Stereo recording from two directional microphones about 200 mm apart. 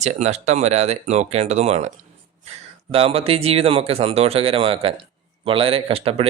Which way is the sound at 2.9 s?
30° right (ahead or behind).